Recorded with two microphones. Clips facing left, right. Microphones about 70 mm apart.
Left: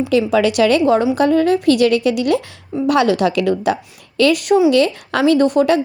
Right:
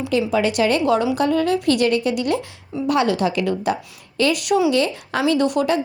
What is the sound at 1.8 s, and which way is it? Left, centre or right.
A woman's voice, left.